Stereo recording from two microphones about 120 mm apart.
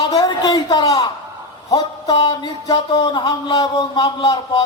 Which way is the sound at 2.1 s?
45° left (ahead or behind).